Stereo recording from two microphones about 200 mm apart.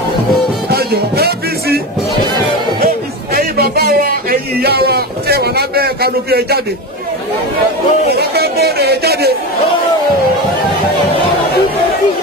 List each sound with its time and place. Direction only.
0.7 s music: 50° right (ahead or behind)
3.3 s a sound: 50° right (ahead or behind)
8.1 s a man's voice: 50° right (ahead or behind)